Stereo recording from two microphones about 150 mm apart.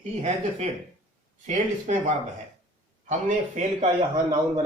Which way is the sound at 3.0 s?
50° right (ahead or behind).